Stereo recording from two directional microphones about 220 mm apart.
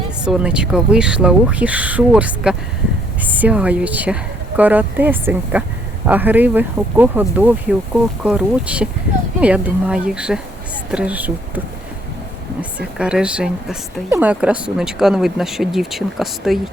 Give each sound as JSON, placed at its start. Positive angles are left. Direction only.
{"t": 0.3, "sound": "speech", "side_deg": -5}
{"t": 12.8, "sound": "speech", "side_deg": -5}